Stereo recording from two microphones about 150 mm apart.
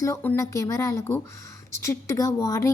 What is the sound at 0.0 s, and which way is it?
A woman's voice, 15° left (ahead or behind).